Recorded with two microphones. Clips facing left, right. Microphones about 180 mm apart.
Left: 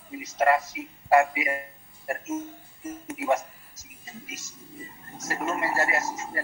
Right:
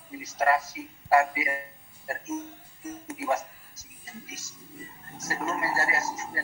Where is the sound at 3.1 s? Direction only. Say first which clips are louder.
Left 3 dB; 25° left (ahead or behind).